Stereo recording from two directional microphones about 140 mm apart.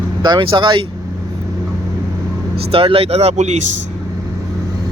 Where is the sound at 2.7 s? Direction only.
40° right (ahead or behind).